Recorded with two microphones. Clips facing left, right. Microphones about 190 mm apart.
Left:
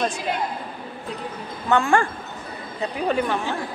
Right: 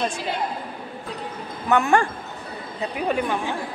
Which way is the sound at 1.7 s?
20° right (ahead or behind).